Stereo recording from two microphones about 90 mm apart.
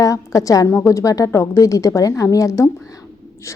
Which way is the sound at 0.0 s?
40° left (ahead or behind).